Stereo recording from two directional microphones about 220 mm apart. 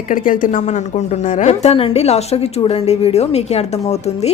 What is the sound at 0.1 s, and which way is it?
A woman's voice, 35° left (ahead or behind).